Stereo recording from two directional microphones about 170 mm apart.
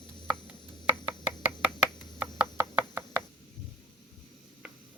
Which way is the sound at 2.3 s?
15° right (ahead or behind).